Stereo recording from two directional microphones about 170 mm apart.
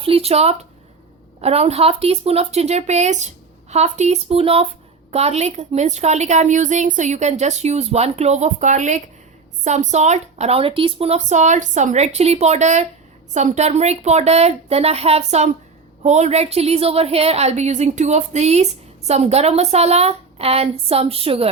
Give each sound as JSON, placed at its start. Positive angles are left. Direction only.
{"t": 0.0, "sound": "a woman's voice", "side_deg": -35}